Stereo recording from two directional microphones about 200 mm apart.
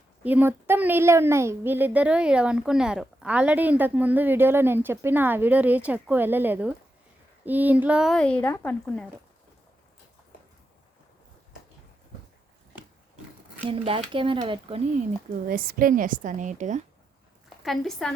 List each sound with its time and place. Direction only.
0.2 s a woman's voice: 10° right (ahead or behind); by 8.7 s 10° left (ahead or behind)
13.7 s speech: 25° right (ahead or behind)
15.4 s a woman's voice: 45° right (ahead or behind)
17.6 s a woman's voice: centre (ahead or behind)